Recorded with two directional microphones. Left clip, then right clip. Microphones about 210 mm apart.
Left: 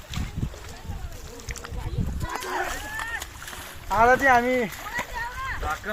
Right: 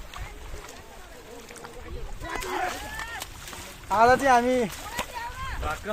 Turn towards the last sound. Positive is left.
turn(degrees=-5)  # may be behind; listen again after turning